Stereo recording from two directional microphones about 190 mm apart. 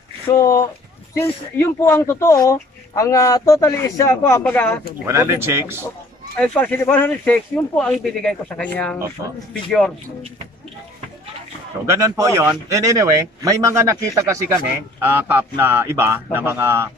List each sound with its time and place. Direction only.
0.3 s speech: 15° left (ahead or behind)
5.0 s speech: 15° right (ahead or behind)
6.3 s a man's voice: 5° left (ahead or behind)
11.8 s speech: 15° right (ahead or behind)